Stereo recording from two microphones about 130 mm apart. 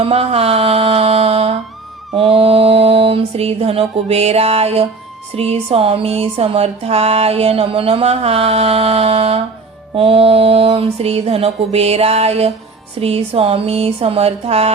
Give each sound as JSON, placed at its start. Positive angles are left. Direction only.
{"t": 0.0, "sound": "music", "side_deg": -50}
{"t": 2.1, "sound": "mantra", "side_deg": -45}
{"t": 5.3, "sound": "speech", "side_deg": -50}